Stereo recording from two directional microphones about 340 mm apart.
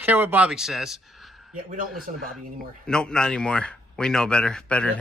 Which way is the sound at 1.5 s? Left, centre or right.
Right.